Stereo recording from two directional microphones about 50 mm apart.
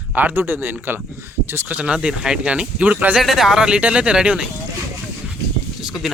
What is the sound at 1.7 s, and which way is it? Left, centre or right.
Speech, right.